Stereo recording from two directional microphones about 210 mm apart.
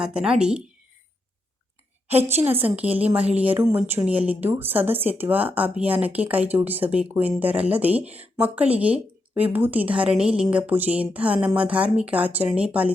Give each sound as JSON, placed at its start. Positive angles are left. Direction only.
{"t": 0.0, "sound": "speech", "side_deg": -5}
{"t": 2.2, "sound": "speech", "side_deg": -10}